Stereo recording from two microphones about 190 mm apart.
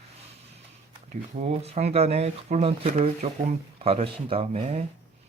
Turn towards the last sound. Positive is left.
turn(degrees=-30)  # may be behind; listen again after turning